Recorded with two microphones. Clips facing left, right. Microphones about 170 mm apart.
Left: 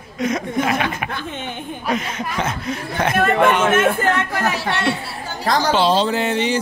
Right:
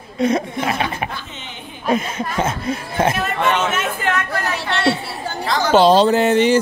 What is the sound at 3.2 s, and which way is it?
Speech, 55° left (ahead or behind).